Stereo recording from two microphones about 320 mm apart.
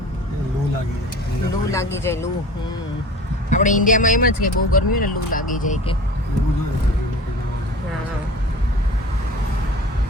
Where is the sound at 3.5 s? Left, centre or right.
Left.